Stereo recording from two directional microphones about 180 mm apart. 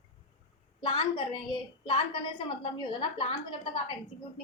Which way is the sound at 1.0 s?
30° left (ahead or behind).